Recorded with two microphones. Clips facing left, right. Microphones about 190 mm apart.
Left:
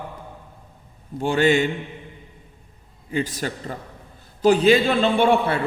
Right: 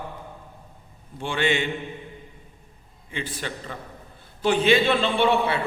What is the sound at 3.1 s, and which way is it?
A man's voice, 40° left (ahead or behind).